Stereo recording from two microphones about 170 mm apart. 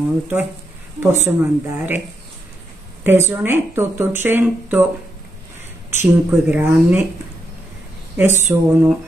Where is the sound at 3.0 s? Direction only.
15° right (ahead or behind).